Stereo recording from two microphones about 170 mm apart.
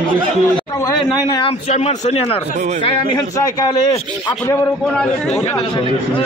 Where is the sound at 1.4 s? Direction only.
40° left (ahead or behind).